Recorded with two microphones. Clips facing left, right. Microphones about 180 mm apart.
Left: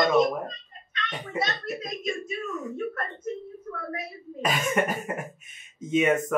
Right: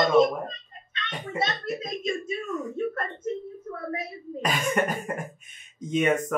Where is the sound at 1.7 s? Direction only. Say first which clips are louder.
Right 2 dB; 25° right (ahead or behind).